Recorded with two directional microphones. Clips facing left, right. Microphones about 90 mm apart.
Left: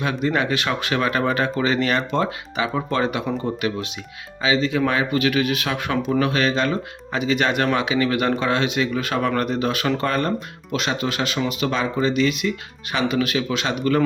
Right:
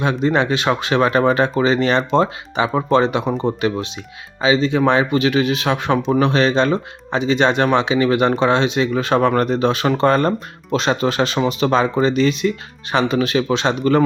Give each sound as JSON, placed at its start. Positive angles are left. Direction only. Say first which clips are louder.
{"t": 0.0, "sound": "speech", "louder": "right 4 dB", "side_deg": -25}